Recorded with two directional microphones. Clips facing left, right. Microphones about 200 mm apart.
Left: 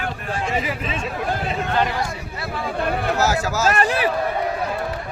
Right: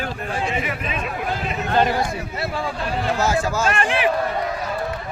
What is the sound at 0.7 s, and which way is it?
Speech, 30° left (ahead or behind).